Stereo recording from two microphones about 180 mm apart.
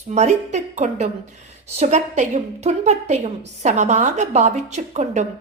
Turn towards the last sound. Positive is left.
turn(degrees=-40)  # may be behind; listen again after turning